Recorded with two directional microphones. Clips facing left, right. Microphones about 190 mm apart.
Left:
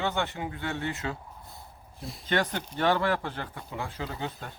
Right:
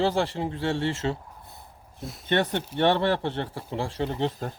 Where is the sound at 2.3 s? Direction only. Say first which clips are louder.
Right 4 dB; 25° right (ahead or behind).